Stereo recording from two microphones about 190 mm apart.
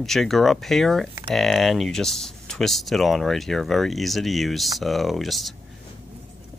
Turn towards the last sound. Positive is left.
turn(degrees=0)  # may be behind; listen again after turning